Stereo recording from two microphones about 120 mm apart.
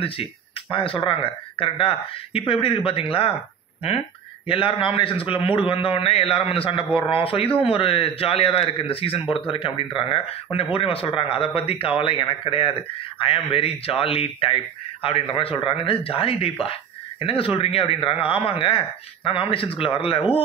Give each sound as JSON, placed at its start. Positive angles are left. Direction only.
{"t": 0.0, "sound": "speech", "side_deg": 50}
{"t": 4.5, "sound": "speech", "side_deg": 50}